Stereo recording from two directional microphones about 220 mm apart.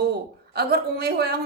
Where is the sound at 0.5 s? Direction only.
45° right (ahead or behind).